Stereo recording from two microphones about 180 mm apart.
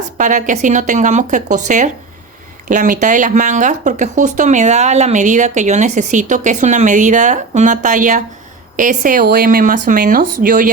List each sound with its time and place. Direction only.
0.2 s speech: 45° right (ahead or behind)